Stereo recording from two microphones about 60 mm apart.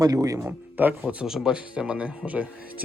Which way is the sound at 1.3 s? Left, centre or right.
Centre.